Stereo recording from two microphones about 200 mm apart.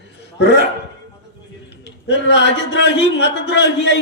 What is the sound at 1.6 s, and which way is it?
A man's voice, 60° left (ahead or behind).